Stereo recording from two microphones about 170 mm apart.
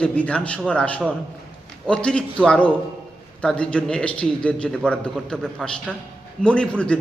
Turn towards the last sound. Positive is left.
turn(degrees=5)  # may be behind; listen again after turning